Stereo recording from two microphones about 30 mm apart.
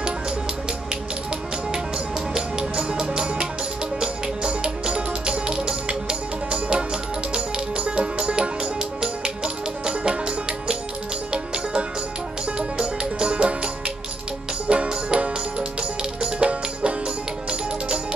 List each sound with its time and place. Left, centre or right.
2.5 s music: right
12.5 s music: right
14.7 s music: right
16.3 s music: right